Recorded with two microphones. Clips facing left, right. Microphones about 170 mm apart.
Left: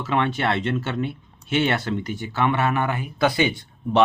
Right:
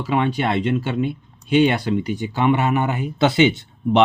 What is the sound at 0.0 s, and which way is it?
Speech, 10° right (ahead or behind).